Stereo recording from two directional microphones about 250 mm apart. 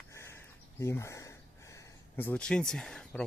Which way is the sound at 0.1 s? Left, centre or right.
Centre.